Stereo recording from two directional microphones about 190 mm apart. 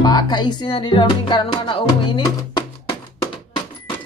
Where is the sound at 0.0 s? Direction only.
20° left (ahead or behind).